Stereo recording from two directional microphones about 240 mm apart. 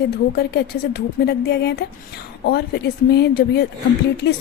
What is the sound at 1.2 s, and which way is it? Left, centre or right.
A woman's voice, left.